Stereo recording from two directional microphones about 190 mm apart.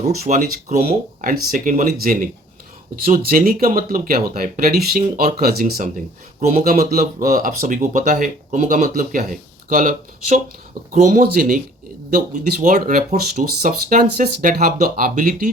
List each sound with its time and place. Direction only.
0.3 s speech: 45° right (ahead or behind)